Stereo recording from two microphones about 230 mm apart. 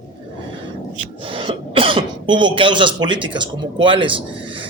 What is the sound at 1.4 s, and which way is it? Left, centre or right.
A man's voice, right.